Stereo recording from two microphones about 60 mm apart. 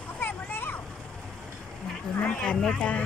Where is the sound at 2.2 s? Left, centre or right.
Centre.